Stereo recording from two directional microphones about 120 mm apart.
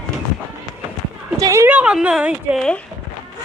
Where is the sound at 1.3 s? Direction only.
25° right (ahead or behind); by 2.6 s 10° right (ahead or behind).